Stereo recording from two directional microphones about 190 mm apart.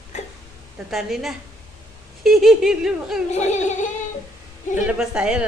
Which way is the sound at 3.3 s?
40° left (ahead or behind).